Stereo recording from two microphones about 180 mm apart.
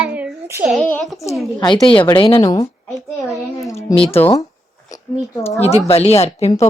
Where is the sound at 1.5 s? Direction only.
25° left (ahead or behind).